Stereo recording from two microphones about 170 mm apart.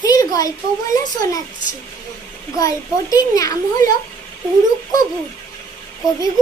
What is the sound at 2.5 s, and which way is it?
A child's voice, 20° left (ahead or behind).